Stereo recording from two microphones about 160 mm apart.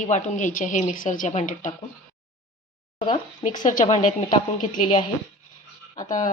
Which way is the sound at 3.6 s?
55° left (ahead or behind).